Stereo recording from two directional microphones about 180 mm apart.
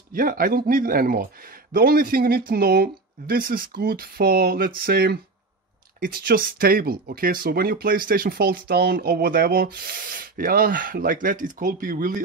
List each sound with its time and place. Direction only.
0.1 s speech: 50° right (ahead or behind)